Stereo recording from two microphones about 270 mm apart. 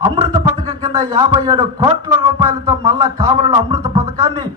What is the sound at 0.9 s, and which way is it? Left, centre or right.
A man's voice, centre.